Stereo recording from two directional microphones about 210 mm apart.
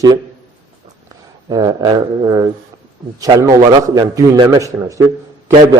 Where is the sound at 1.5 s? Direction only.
20° right (ahead or behind).